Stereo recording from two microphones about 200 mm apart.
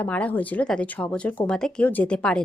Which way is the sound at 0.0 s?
5° left (ahead or behind).